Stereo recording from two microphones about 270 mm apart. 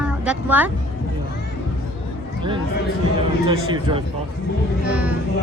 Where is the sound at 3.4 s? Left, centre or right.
Centre.